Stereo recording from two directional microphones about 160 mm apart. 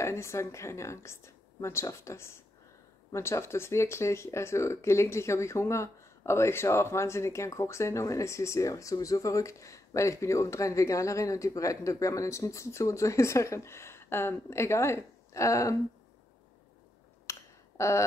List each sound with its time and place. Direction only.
0.0 s speech: 15° left (ahead or behind)
17.3 s finger snapping: 20° left (ahead or behind)